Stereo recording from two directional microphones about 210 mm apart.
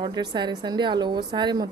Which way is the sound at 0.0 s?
20° right (ahead or behind).